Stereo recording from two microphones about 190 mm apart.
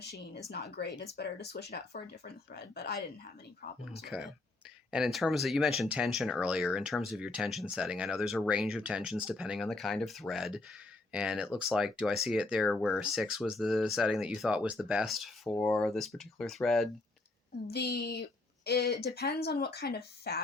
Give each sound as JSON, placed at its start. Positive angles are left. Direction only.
{"t": 0.5, "sound": "speech", "side_deg": 60}
{"t": 4.0, "sound": "speech", "side_deg": 0}
{"t": 17.7, "sound": "speech", "side_deg": 60}